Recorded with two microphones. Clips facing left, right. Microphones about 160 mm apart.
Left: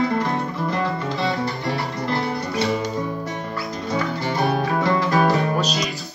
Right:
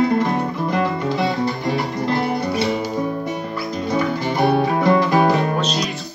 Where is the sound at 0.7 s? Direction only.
15° right (ahead or behind).